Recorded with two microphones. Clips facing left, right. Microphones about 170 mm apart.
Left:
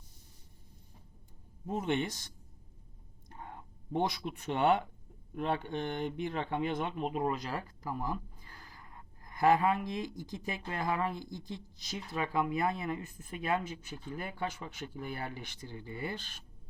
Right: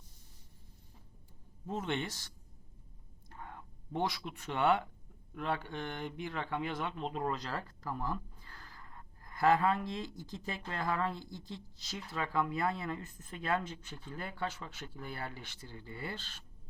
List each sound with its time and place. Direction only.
1.6 s speech: 15° left (ahead or behind)
3.2 s a sound: 20° left (ahead or behind)
5.3 s speech: 20° left (ahead or behind)